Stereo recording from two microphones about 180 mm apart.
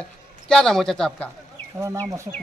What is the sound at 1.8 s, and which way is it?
Speech, 15° right (ahead or behind).